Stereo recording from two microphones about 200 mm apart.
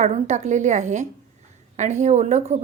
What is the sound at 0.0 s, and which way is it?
A woman's voice, 35° right (ahead or behind).